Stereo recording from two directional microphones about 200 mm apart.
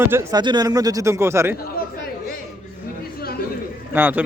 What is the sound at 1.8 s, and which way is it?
Chatter, 50° left (ahead or behind).